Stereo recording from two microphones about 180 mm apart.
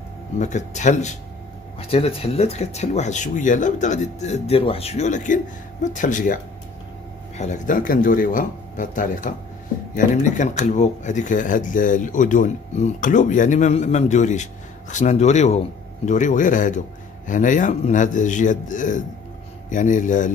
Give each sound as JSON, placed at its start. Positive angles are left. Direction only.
{"t": 0.4, "sound": "speech", "side_deg": 40}